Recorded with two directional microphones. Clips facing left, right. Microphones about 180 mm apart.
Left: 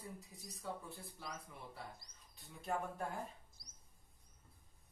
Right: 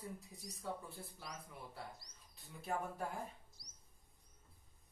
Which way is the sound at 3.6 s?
50° left (ahead or behind).